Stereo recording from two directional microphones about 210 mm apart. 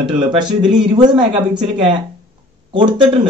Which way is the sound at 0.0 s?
20° right (ahead or behind).